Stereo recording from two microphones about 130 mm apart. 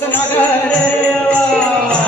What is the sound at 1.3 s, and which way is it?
Music, 10° left (ahead or behind).